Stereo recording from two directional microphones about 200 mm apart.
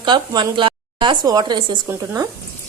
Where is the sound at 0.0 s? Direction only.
20° right (ahead or behind).